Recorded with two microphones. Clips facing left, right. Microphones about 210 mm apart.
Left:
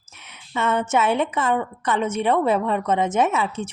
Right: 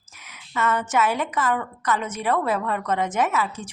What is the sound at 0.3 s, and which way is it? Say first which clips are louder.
A woman's voice: left 1 dB; 25° left (ahead or behind).